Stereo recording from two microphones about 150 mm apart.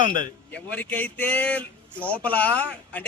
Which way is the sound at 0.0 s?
35° right (ahead or behind).